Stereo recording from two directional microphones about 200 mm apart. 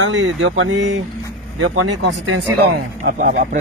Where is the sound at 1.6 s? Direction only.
85° right.